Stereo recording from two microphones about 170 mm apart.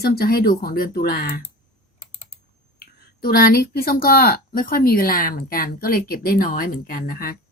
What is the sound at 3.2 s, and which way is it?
Speech, 60° left (ahead or behind).